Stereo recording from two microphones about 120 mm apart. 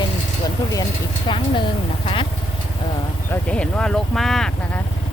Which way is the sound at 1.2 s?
45° left (ahead or behind).